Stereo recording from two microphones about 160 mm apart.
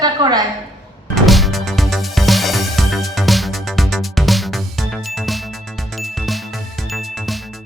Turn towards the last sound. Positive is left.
turn(degrees=0)  # may be behind; listen again after turning